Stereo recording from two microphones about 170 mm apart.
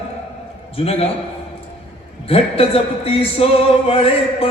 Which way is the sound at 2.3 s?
35° left (ahead or behind).